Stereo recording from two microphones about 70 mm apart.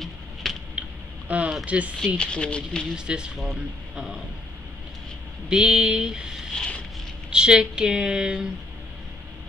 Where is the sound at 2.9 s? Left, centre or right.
Centre.